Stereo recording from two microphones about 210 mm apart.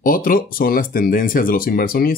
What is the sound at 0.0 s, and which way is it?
Speech, 40° left (ahead or behind).